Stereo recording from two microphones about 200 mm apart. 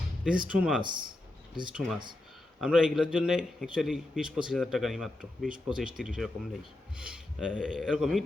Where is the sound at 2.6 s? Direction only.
5° right (ahead or behind).